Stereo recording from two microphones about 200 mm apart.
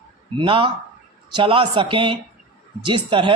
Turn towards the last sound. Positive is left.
turn(degrees=-25)  # may be behind; listen again after turning